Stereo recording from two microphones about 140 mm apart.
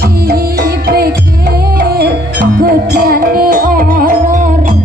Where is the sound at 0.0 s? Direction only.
90° right.